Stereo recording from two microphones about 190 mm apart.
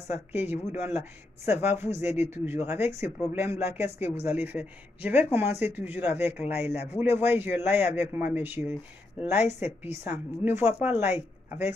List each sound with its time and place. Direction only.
0.1 s speech: 10° right (ahead or behind)
3.6 s speech: 35° left (ahead or behind)
4.3 s speech: 10° right (ahead or behind)
6.5 s speech: 35° left (ahead or behind)
6.9 s speech: 10° right (ahead or behind)